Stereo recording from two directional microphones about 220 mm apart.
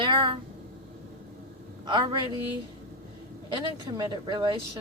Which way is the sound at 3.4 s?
20° right (ahead or behind).